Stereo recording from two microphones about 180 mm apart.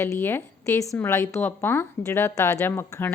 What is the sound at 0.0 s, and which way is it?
A woman's voice, 10° left (ahead or behind).